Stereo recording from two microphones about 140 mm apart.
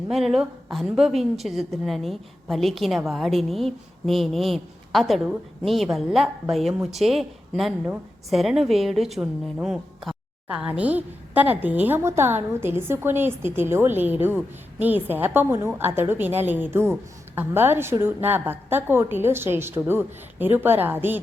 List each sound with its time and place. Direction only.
0.1 s a woman's voice: centre (ahead or behind)